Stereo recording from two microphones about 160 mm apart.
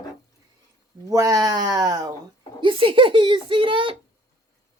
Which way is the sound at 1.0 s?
25° right (ahead or behind).